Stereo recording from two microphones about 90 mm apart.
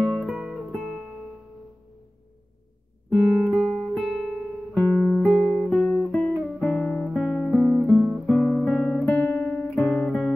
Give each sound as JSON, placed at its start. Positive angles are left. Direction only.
{"t": 0.0, "sound": "music", "side_deg": 0}
{"t": 3.1, "sound": "music", "side_deg": -5}
{"t": 4.8, "sound": "music", "side_deg": 15}
{"t": 5.3, "sound": "music", "side_deg": 0}
{"t": 5.9, "sound": "guitar", "side_deg": 10}
{"t": 7.5, "sound": "guitar", "side_deg": 10}
{"t": 8.0, "sound": "guitar", "side_deg": -5}
{"t": 9.1, "sound": "guitar", "side_deg": 20}